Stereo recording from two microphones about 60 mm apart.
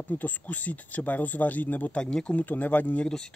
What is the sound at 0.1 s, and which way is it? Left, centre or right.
Speech, left.